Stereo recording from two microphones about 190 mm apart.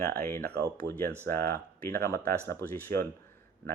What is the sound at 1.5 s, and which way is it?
Speech, 10° left (ahead or behind).